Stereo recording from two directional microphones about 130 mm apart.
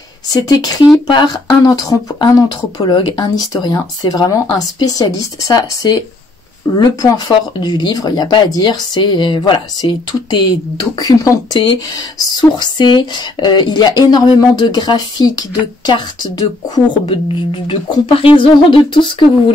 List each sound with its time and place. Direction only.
0.3 s speech: 30° left (ahead or behind)
11.0 s speech: 30° left (ahead or behind)
17.0 s speech: 40° left (ahead or behind)